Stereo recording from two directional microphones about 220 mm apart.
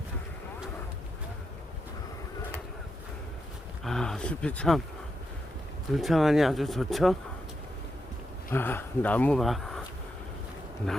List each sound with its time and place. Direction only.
3.8 s speech: centre (ahead or behind)
5.9 s speech: centre (ahead or behind)
8.4 s speech: 10° left (ahead or behind)